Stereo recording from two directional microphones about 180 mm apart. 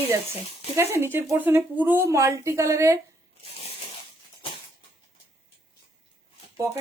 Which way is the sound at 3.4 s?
35° left (ahead or behind).